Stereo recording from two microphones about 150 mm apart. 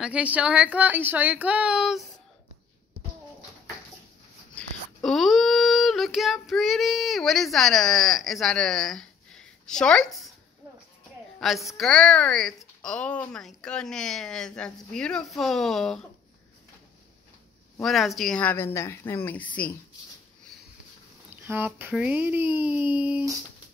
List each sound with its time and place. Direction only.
0.0 s speech: 10° right (ahead or behind)
4.6 s child singing: centre (ahead or behind)
11.3 s a woman's voice: centre (ahead or behind)
17.8 s speech: centre (ahead or behind)
21.3 s speech: 15° right (ahead or behind)